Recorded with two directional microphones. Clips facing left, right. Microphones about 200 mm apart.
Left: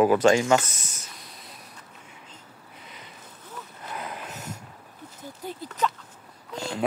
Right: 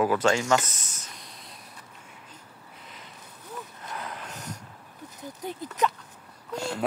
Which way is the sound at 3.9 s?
10° left (ahead or behind).